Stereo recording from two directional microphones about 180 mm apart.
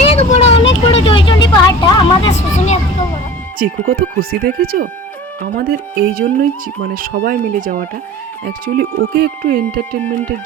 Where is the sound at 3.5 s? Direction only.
55° right (ahead or behind).